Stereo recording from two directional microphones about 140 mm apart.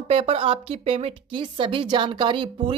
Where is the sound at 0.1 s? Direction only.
40° right (ahead or behind).